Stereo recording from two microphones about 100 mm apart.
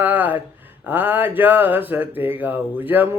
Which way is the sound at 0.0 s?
20° right (ahead or behind).